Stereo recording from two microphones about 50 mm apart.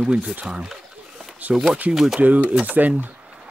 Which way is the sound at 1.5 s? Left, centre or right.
Centre.